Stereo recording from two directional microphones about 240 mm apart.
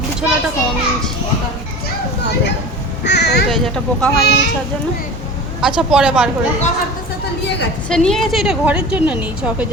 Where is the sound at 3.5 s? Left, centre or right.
Centre.